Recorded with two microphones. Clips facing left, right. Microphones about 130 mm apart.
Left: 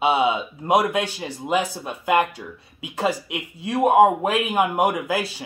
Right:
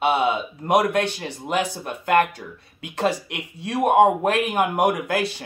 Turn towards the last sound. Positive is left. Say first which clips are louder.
# right 1 dB
turn(degrees=5)  # may be behind; listen again after turning